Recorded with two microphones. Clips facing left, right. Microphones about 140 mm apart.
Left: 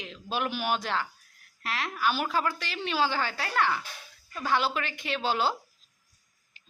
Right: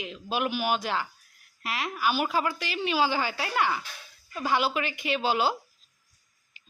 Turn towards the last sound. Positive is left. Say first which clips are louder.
# right 2 dB
turn(degrees=-5)  # may be behind; listen again after turning